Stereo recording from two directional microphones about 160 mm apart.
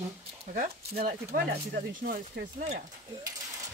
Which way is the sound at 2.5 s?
45° right (ahead or behind).